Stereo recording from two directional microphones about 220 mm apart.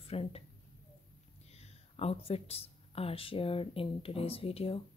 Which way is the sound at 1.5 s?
30° left (ahead or behind).